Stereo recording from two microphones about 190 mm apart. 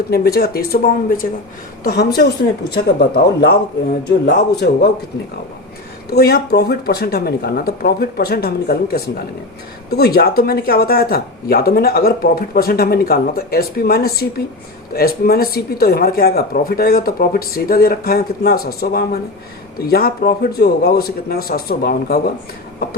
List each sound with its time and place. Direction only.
0.1 s speech: 55° left (ahead or behind)
6.1 s speech: 55° left (ahead or behind)